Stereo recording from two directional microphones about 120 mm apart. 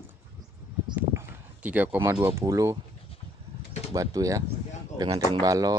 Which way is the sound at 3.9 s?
30° right (ahead or behind).